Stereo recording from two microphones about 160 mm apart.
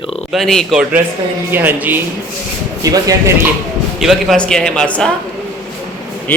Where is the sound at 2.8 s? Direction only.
20° right (ahead or behind).